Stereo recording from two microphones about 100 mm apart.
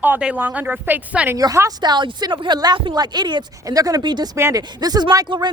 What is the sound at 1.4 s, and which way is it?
Speech, 35° right (ahead or behind).